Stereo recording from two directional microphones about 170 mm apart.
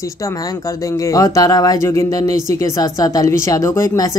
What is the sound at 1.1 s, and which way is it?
Speech, 20° left (ahead or behind).